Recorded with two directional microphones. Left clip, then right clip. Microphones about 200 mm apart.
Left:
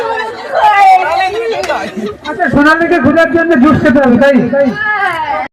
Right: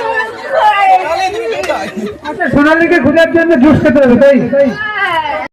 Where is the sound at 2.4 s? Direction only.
10° left (ahead or behind).